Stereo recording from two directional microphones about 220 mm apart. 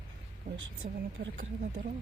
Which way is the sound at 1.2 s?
45° right (ahead or behind).